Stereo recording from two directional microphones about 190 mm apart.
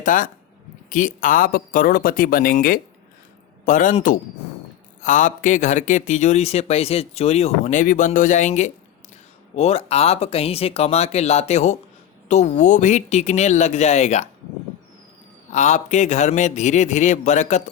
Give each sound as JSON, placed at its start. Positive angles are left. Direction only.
{"t": 0.0, "sound": "speech", "side_deg": 45}
{"t": 15.5, "sound": "speech", "side_deg": 40}